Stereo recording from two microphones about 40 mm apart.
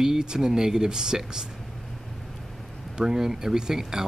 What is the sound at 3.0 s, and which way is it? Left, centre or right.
Speech, centre.